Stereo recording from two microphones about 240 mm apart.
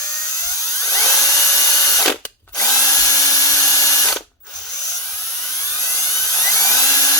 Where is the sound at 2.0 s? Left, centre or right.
Centre.